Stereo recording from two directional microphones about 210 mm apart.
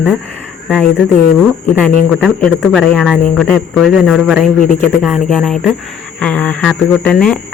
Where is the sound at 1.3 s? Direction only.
5° left (ahead or behind).